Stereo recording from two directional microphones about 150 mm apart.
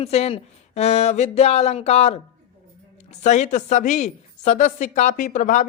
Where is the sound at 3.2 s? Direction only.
50° left (ahead or behind).